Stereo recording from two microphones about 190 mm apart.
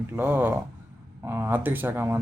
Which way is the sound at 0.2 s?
10° right (ahead or behind).